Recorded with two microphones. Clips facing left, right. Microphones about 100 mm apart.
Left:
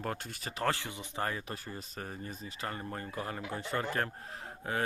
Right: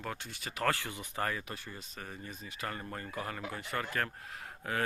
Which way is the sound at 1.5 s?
40° left (ahead or behind).